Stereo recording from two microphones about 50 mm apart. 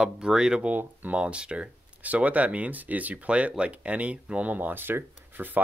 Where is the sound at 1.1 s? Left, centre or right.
Right.